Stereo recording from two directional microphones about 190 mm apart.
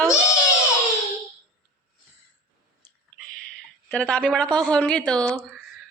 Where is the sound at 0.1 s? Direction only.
15° left (ahead or behind).